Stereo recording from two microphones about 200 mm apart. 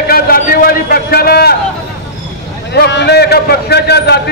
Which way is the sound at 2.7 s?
55° left (ahead or behind).